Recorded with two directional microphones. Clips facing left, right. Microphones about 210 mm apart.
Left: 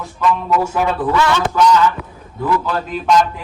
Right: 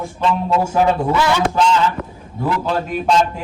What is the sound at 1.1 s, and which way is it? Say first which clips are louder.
Speech: left 1 dB; 10° right (ahead or behind).